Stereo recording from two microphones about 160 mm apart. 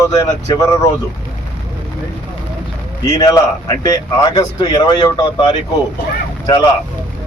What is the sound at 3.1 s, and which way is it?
Speech, 25° left (ahead or behind).